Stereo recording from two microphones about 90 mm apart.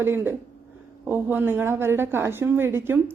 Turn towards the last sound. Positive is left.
turn(degrees=-25)  # may be behind; listen again after turning